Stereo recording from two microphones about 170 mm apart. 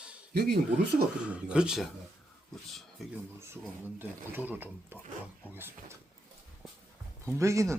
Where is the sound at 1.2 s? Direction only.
5° right (ahead or behind).